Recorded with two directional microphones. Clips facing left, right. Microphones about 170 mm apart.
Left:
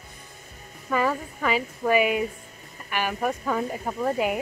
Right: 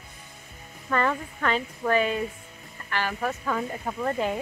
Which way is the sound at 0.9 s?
5° left (ahead or behind).